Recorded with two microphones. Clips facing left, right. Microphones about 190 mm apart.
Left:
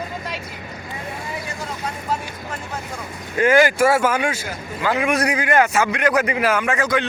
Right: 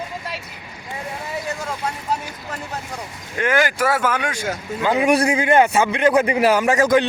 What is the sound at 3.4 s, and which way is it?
Speech, 10° left (ahead or behind).